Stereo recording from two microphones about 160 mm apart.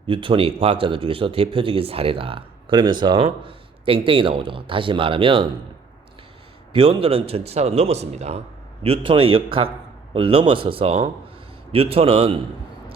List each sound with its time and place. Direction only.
0.1 s a man's voice: 35° right (ahead or behind)
6.7 s a man's voice: 35° right (ahead or behind)